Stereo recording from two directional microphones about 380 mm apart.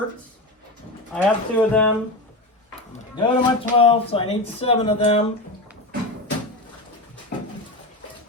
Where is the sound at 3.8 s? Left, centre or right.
Centre.